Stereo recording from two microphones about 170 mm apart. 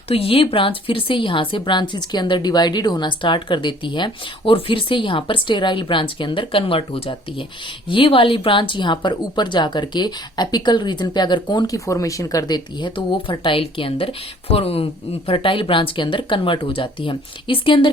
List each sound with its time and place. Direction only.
0.1 s speech: 35° left (ahead or behind)